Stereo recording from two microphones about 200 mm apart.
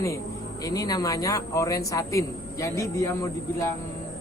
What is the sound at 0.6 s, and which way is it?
A man's voice, 15° left (ahead or behind).